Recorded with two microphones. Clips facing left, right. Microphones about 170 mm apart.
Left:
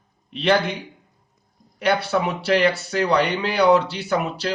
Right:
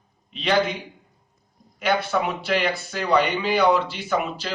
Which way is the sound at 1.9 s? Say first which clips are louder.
Left 2 dB; 75° left (ahead or behind).